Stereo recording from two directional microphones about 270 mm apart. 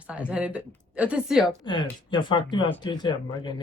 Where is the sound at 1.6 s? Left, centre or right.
Centre.